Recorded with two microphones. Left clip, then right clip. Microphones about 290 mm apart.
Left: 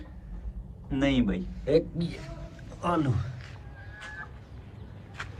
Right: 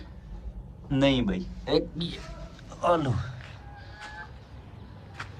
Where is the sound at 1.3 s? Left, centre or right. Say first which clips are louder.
Left 2 dB; centre.